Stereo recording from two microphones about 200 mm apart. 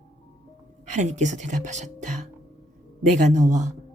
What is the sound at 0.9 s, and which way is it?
Speech, 35° right (ahead or behind).